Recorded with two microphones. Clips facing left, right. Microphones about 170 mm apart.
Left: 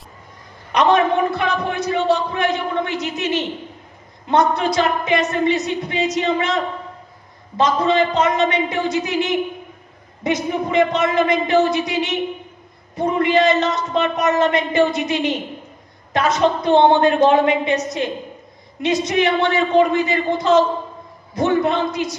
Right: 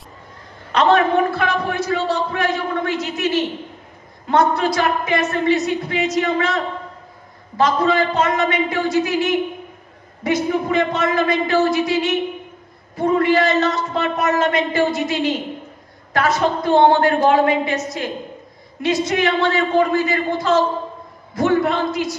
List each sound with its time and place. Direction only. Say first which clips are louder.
0.7 s a man's voice: even; 15° left (ahead or behind)